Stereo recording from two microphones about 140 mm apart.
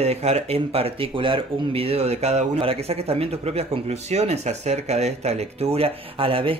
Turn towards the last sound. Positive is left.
turn(degrees=-40)  # may be behind; listen again after turning